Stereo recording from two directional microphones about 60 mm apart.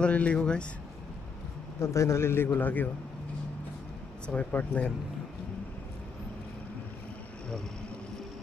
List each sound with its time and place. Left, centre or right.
0.0 s speech: left
1.8 s a man's voice: left
4.3 s speech: left